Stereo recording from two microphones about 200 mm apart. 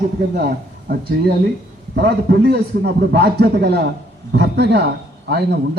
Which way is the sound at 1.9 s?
55° right (ahead or behind).